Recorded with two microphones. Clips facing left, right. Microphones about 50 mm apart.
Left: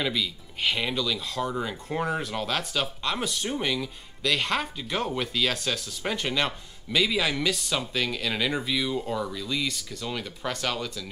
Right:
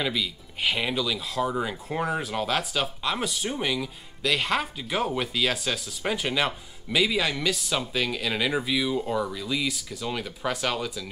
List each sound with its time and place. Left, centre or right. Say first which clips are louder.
0.0 s speech: even; centre